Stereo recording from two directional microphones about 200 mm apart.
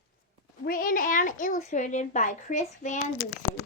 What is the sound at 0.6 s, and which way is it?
A child's voice, 45° left (ahead or behind).